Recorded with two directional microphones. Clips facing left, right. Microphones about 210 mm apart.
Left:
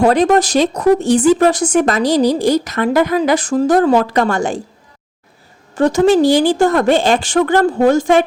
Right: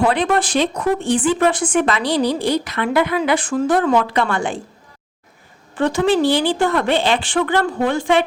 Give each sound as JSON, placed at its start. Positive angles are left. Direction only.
{"t": 0.0, "sound": "speech", "side_deg": 40}
{"t": 5.7, "sound": "a woman's voice", "side_deg": 45}